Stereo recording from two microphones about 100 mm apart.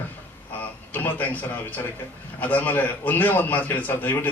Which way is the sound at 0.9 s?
15° left (ahead or behind).